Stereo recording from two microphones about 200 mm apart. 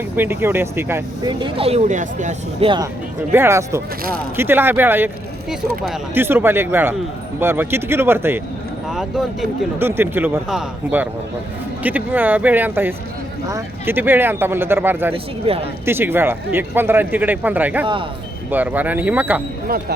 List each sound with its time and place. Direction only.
0.2 s speech: 10° right (ahead or behind); by 2.6 s 40° right (ahead or behind)
3.3 s speech: 15° right (ahead or behind)
15.1 s speech: 30° right (ahead or behind)
15.9 s speech: 10° right (ahead or behind)